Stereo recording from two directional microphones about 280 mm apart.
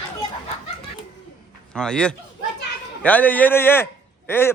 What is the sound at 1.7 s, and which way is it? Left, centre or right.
Speech, centre.